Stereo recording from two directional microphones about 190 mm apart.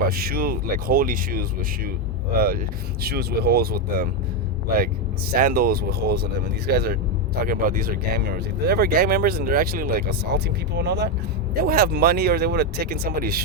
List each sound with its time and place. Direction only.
0.1 s speech: 50° right (ahead or behind)
5.3 s speech: 50° right (ahead or behind)